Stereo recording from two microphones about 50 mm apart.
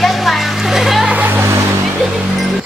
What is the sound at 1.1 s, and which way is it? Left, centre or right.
Music, right.